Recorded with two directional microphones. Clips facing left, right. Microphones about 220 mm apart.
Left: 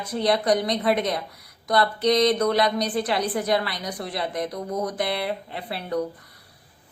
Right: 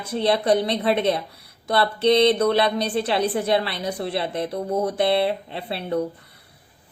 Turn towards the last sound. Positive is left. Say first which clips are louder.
# right 2 dB
turn(degrees=-25)  # may be behind; listen again after turning